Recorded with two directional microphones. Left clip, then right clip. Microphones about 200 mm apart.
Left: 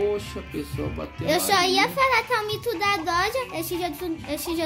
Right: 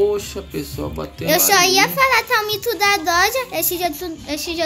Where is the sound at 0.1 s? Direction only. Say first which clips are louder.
Right 6 dB; 20° right (ahead or behind).